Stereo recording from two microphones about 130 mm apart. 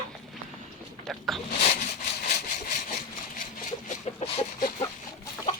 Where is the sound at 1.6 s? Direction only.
55° left (ahead or behind).